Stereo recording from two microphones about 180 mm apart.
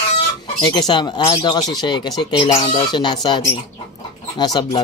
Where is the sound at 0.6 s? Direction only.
25° left (ahead or behind).